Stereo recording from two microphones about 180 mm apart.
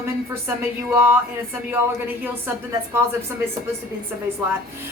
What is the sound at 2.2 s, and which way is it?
Speech, 10° right (ahead or behind).